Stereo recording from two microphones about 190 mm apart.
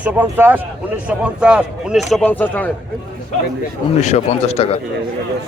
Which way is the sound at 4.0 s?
35° left (ahead or behind).